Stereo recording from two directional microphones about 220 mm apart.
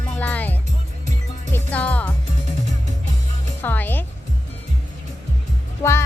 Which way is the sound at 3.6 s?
10° left (ahead or behind).